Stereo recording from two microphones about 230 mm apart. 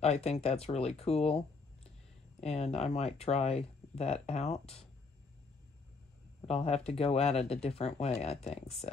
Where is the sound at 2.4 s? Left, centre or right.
Left.